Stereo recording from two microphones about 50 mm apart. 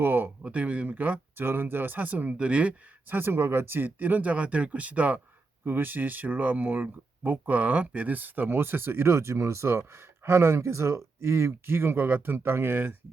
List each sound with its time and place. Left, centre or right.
0.0 s speech: right
0.4 s speech: right
1.4 s speech: right
3.1 s speech: right
5.6 s speech: right